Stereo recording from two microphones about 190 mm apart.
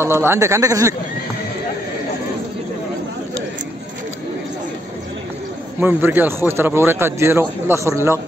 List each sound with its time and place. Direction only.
0.0 s speech: 10° right (ahead or behind)
5.8 s speech: 10° right (ahead or behind)